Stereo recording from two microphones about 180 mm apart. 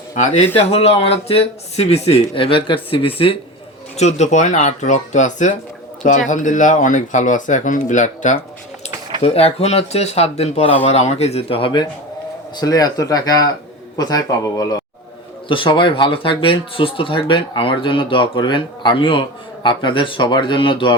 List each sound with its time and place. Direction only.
0.2 s speech: 40° left (ahead or behind)